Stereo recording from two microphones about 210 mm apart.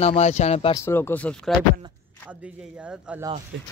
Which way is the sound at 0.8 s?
10° left (ahead or behind).